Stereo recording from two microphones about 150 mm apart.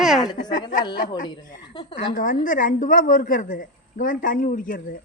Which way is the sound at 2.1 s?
65° left (ahead or behind).